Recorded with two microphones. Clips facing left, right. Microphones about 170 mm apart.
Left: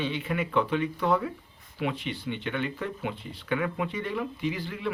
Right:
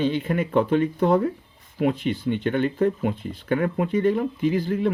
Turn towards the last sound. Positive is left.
turn(degrees=-45)  # may be behind; listen again after turning